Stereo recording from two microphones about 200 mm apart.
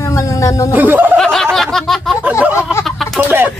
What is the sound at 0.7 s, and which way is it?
Speech, 10° right (ahead or behind).